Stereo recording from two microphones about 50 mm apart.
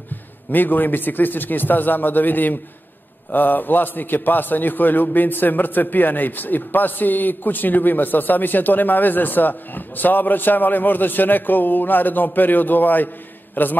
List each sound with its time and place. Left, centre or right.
0.5 s a man's voice: left